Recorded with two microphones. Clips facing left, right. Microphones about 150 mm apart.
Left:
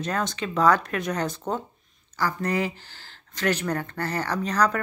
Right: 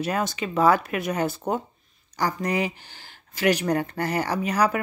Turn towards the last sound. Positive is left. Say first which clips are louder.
# right 1 dB
turn(degrees=-10)  # may be behind; listen again after turning